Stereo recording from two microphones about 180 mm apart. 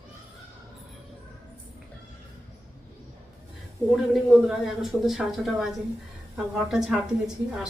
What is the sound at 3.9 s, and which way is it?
Speech, centre (ahead or behind).